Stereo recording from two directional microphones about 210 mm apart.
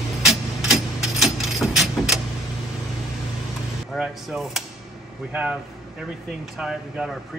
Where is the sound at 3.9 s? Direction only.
Centre (ahead or behind).